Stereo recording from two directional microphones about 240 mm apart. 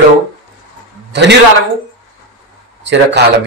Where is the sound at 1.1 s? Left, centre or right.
Right.